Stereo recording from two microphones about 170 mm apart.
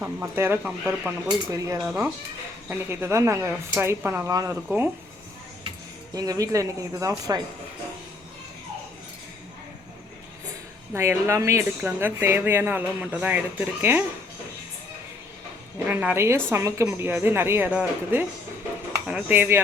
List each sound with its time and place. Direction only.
0.0 s a woman's voice: 15° right (ahead or behind)
1.8 s a woman's voice: 5° right (ahead or behind)
6.1 s speech: 20° right (ahead or behind)
10.9 s a woman's voice: 15° right (ahead or behind)
15.9 s a woman's voice: 10° right (ahead or behind)